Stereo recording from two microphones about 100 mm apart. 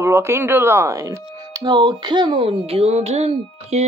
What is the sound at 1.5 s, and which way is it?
Speech, 40° right (ahead or behind).